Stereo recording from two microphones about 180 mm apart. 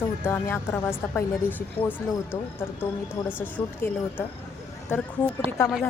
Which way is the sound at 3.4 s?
10° left (ahead or behind).